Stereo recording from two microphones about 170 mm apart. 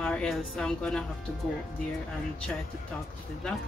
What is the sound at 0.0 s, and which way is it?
A woman's voice, 5° left (ahead or behind).